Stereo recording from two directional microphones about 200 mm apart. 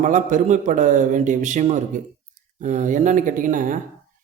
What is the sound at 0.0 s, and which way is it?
Speech, 40° right (ahead or behind).